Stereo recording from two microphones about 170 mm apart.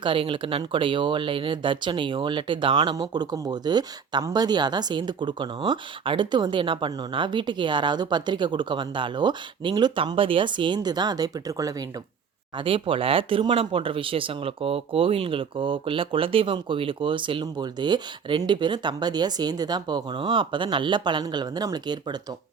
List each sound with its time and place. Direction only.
0.0 s speech: 30° right (ahead or behind)